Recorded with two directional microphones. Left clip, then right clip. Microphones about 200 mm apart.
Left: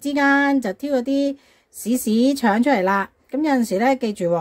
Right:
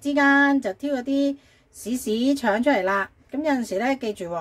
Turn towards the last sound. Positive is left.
turn(degrees=40)  # may be behind; listen again after turning